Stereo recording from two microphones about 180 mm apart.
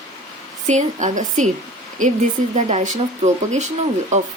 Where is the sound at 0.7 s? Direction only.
40° right (ahead or behind).